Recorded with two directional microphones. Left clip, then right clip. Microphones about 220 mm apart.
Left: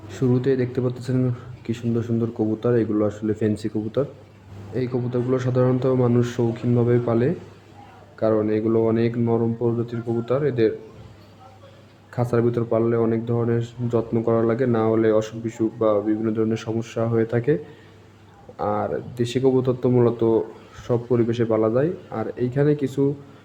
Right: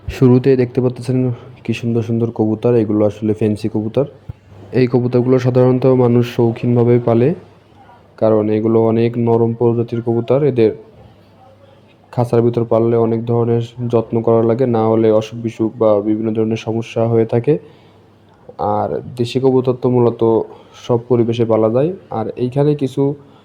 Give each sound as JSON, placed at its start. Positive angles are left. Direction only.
{"t": 0.1, "sound": "speech", "side_deg": -30}
{"t": 4.7, "sound": "speech", "side_deg": -35}
{"t": 12.1, "sound": "speech", "side_deg": -20}